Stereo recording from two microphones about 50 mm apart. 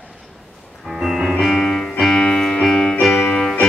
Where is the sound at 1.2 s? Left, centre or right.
Centre.